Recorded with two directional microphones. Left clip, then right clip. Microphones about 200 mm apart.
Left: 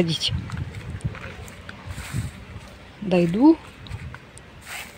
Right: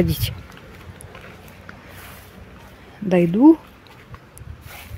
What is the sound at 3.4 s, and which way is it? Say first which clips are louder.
Speech: right 4 dB; 35° right (ahead or behind).